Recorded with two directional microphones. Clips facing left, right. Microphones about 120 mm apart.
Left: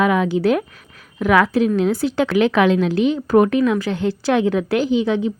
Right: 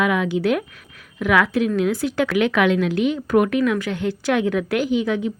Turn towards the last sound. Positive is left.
turn(degrees=30)  # may be behind; listen again after turning